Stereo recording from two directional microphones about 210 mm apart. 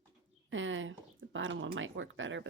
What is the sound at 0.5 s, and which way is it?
A woman's voice, 65° right (ahead or behind).